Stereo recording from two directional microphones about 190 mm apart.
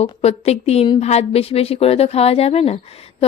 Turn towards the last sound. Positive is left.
turn(degrees=30)  # may be behind; listen again after turning